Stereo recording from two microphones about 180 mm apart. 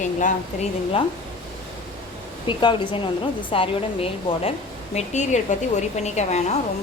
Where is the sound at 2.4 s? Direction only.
30° left (ahead or behind).